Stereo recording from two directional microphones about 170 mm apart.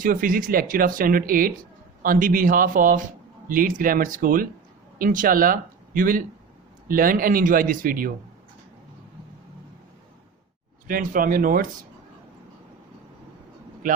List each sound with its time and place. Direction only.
0.0 s speech: 55° right (ahead or behind)
10.8 s speech: 55° right (ahead or behind)